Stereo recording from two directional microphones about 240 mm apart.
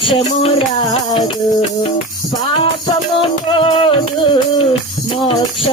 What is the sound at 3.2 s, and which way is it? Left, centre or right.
Music, left.